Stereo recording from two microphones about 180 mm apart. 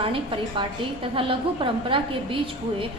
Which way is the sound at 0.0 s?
30° right (ahead or behind).